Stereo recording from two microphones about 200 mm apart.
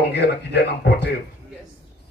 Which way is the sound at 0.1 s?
55° left (ahead or behind).